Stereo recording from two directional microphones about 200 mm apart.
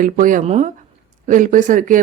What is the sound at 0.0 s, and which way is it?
Speech, 40° right (ahead or behind).